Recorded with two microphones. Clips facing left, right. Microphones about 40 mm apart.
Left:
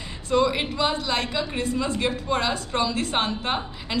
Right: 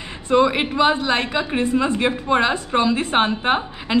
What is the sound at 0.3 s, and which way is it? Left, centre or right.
A woman's voice, right.